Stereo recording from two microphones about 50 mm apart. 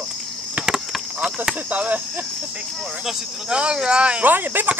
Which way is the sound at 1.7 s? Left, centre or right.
Right.